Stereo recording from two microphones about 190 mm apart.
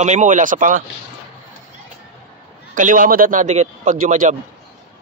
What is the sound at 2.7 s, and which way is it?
Speech, 45° right (ahead or behind).